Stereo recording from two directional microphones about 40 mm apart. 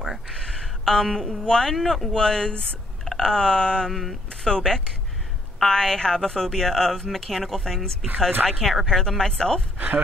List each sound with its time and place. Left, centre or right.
0.3 s a sound: centre
1.4 s speech: centre
1.8 s speech: centre
2.1 s speech: centre
3.1 s a sound: centre
3.9 s speech: centre
4.3 s speech: left
5.7 s speech: centre
9.8 s speech: right